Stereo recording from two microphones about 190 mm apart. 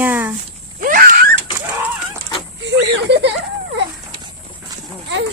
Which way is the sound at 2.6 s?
65° right (ahead or behind).